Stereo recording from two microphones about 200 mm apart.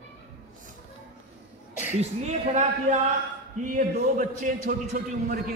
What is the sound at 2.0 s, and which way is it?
A man's voice, 35° right (ahead or behind).